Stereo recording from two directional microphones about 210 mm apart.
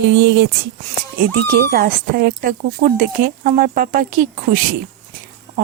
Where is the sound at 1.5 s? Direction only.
45° right (ahead or behind).